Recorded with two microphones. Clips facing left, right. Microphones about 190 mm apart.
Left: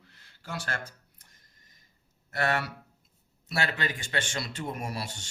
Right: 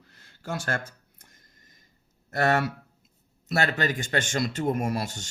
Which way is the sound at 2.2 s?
45° right (ahead or behind).